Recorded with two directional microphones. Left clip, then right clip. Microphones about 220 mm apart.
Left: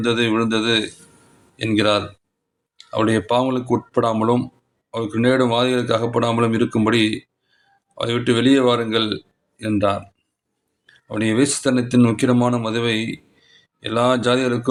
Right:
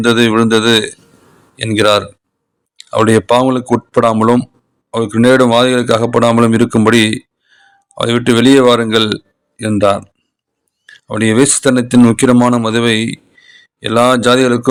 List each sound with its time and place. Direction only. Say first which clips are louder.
0.0 s speech: right 8 dB; 35° right (ahead or behind)